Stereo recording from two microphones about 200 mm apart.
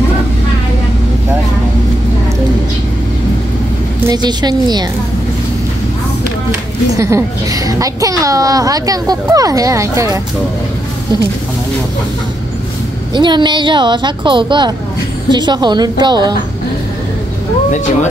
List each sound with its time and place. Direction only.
4.1 s speech: 20° right (ahead or behind)
7.0 s a child's voice: 15° right (ahead or behind)
13.1 s speech: 25° right (ahead or behind)